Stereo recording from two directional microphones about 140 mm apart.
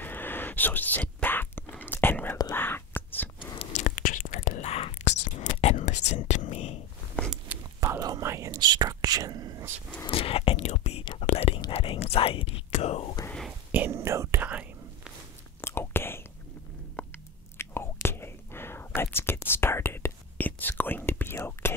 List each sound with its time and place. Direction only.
0.0 s whispering: 15° left (ahead or behind)
3.5 s whispering: 55° left (ahead or behind)
4.6 s whispering: 45° left (ahead or behind)
7.5 s whispering: 10° right (ahead or behind)
7.8 s whispering: 25° right (ahead or behind)
10.0 s whispering: 40° left (ahead or behind)
13.7 s whispering: 15° right (ahead or behind)
15.6 s whispering: 15° left (ahead or behind)
17.0 s biting: 15° left (ahead or behind)
17.6 s whispering: 15° left (ahead or behind)